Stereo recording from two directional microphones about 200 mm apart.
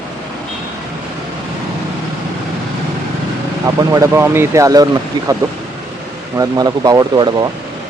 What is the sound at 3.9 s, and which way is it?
Speech, 15° right (ahead or behind).